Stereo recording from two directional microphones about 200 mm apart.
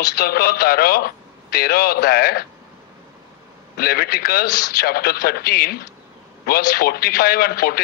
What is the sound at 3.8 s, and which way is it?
A man's voice, 50° left (ahead or behind).